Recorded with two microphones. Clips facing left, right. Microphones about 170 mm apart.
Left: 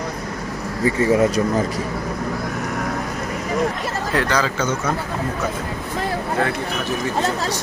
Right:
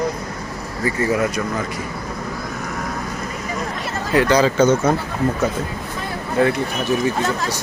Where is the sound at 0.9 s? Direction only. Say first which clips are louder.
Left 3 dB; 25° left (ahead or behind).